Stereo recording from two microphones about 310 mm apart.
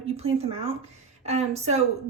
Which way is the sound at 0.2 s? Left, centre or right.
Centre.